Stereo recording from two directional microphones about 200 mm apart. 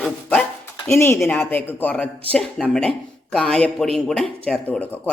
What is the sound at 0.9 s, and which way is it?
Speech, 10° left (ahead or behind).